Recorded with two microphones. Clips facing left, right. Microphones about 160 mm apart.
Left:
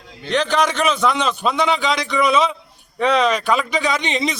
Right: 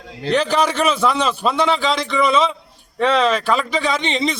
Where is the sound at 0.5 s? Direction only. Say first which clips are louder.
Right 1 dB; 5° right (ahead or behind).